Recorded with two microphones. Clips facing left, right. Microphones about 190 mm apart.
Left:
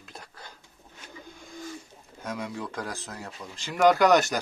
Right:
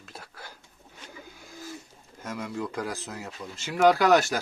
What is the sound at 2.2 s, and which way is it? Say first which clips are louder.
Speech: right 1 dB; 5° right (ahead or behind).